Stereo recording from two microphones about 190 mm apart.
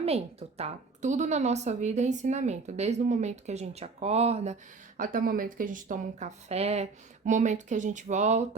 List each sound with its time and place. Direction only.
0.0 s a woman's voice: 35° right (ahead or behind)
4.9 s a woman's voice: 45° right (ahead or behind)